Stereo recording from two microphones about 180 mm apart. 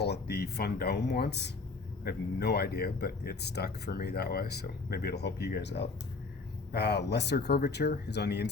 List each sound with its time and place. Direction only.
0.0 s speech: 65° left (ahead or behind)